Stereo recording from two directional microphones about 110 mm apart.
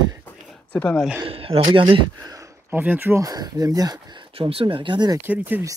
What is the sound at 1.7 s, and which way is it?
Speech, 50° right (ahead or behind).